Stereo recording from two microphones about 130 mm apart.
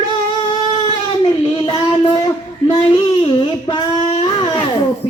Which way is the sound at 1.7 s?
40° left (ahead or behind).